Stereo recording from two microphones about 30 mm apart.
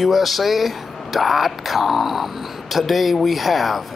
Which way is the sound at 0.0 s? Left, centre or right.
Centre.